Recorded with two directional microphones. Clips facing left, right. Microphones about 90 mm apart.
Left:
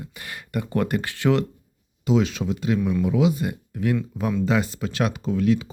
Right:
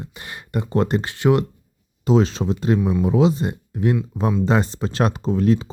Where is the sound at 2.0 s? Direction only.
40° right (ahead or behind).